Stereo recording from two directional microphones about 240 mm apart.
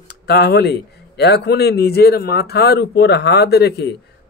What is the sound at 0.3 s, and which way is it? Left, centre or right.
A man's voice, left.